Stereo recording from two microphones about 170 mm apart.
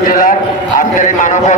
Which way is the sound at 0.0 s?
55° left (ahead or behind).